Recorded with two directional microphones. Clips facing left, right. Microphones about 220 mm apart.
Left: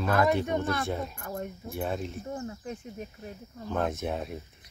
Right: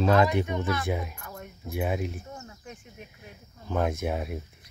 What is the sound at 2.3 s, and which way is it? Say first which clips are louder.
Speech: left 7 dB; 30° left (ahead or behind).